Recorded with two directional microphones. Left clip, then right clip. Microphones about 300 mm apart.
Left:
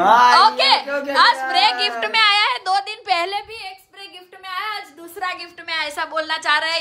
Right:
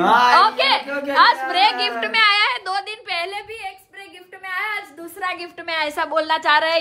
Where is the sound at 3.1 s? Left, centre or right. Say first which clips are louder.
Even; left.